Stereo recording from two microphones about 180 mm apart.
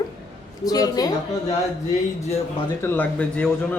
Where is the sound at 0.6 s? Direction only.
20° left (ahead or behind).